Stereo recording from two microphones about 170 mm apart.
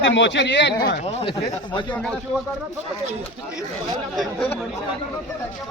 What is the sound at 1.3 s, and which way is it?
Speech, 25° left (ahead or behind).